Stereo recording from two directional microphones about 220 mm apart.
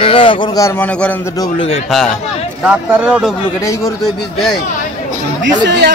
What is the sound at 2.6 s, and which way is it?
Speech, 5° right (ahead or behind).